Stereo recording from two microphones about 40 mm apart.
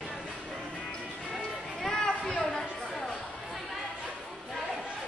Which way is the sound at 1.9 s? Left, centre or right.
Centre.